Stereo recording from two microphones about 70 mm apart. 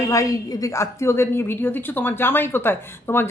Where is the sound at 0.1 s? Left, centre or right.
Left.